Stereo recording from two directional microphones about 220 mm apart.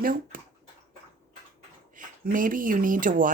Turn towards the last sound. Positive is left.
turn(degrees=-35)  # may be behind; listen again after turning